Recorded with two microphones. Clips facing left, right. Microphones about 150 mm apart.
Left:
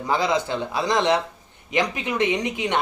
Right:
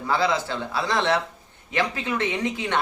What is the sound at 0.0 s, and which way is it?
A man's voice, 15° left (ahead or behind).